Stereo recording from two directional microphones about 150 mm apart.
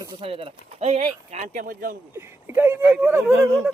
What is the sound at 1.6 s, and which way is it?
Speech, 70° right (ahead or behind).